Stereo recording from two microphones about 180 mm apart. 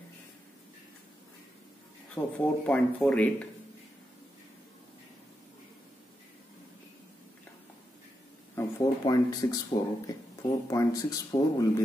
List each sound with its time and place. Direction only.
2.1 s speech: 10° left (ahead or behind)
8.5 s speech: 20° left (ahead or behind)